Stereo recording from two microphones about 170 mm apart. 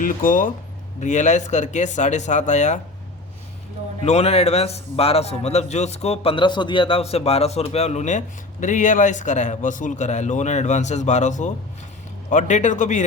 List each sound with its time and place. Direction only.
0.0 s a man's voice: 55° left (ahead or behind)
4.0 s a man's voice: 40° left (ahead or behind)